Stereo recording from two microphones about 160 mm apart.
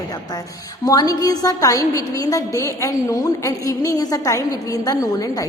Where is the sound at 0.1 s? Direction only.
25° left (ahead or behind).